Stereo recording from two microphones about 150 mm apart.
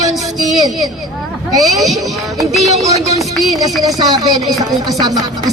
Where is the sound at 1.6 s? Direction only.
Centre (ahead or behind).